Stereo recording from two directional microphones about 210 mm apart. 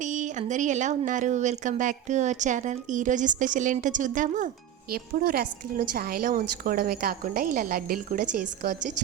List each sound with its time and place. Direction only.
0.0 s a woman's voice: 35° right (ahead or behind)